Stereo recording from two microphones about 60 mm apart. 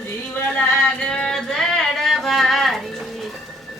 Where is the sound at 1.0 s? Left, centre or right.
Centre.